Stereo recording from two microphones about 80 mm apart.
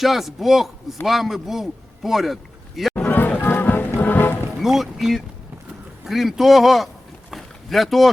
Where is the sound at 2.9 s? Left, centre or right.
Left.